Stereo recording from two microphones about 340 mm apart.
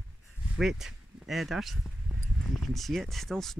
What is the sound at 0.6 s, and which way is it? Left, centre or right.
Speech, centre.